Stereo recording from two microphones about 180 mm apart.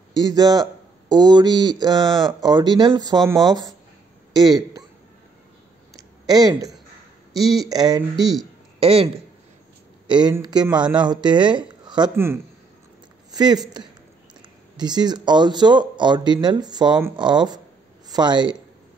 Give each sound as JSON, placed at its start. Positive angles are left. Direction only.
{"t": 0.1, "sound": "speech", "side_deg": -20}
{"t": 6.2, "sound": "speech", "side_deg": -20}
{"t": 8.7, "sound": "speech", "side_deg": -30}
{"t": 13.3, "sound": "speech", "side_deg": -20}
{"t": 14.8, "sound": "speech", "side_deg": -25}